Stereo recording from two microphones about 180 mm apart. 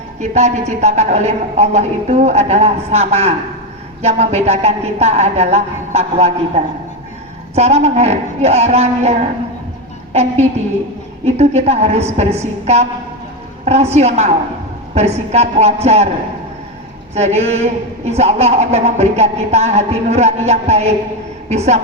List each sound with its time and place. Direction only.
0.2 s a man's voice: 40° right (ahead or behind)
17.2 s a man's voice: 35° right (ahead or behind)